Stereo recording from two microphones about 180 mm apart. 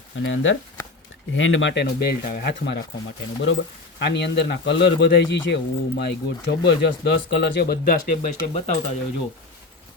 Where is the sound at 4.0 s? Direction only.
70° left (ahead or behind); by 8.4 s 50° left (ahead or behind).